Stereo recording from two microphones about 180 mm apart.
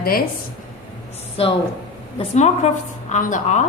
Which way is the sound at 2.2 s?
40° left (ahead or behind).